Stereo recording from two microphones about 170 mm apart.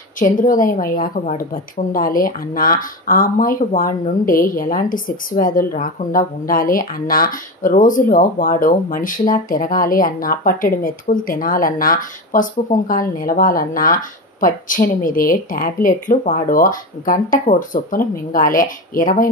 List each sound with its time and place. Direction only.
0.2 s a woman's voice: 50° left (ahead or behind)